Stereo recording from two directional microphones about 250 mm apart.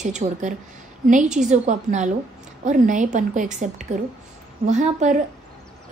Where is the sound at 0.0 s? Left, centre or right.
Right.